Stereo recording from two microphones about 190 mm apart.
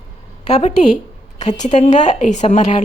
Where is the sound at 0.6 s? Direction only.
35° left (ahead or behind).